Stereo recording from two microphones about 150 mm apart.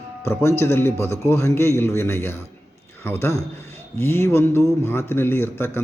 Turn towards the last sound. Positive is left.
turn(degrees=15)  # may be behind; listen again after turning